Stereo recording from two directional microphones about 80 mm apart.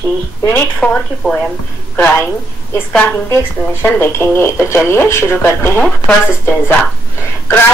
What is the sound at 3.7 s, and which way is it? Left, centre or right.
Speech, left.